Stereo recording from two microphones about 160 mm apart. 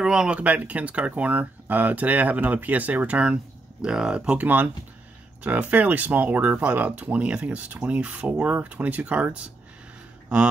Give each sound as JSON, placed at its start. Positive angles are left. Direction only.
{"t": 0.0, "sound": "speech", "side_deg": -5}